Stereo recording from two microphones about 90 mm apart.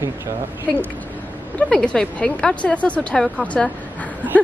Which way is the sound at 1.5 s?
15° left (ahead or behind).